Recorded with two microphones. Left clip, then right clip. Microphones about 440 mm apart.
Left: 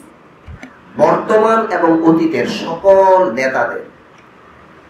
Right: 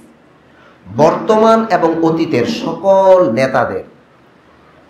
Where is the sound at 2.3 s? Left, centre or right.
Right.